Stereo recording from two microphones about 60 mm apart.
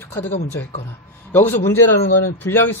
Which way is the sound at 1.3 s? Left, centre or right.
Left.